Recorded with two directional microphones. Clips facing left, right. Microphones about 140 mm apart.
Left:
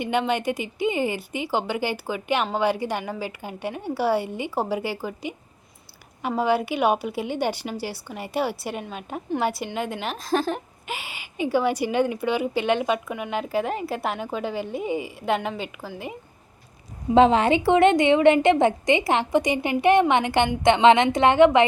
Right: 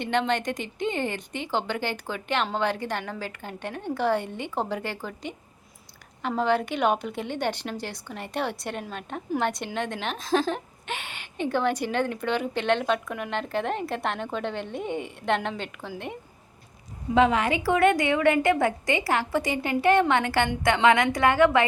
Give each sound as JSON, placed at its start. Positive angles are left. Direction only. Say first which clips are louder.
{"t": 0.0, "sound": "a woman's voice", "louder": "left 2 dB", "side_deg": 10}
{"t": 17.2, "sound": "a woman's voice", "louder": "left 5 dB", "side_deg": 30}